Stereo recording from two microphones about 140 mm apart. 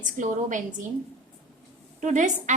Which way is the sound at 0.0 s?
65° right (ahead or behind).